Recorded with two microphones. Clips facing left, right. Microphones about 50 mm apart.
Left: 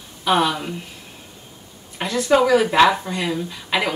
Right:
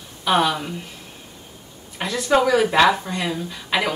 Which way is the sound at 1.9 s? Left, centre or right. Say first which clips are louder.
Left 2 dB; centre.